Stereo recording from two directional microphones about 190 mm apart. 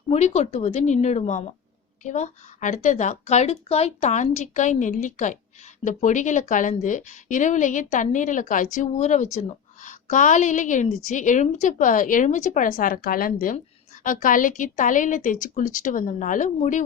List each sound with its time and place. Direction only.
0.1 s a woman's voice: 35° left (ahead or behind)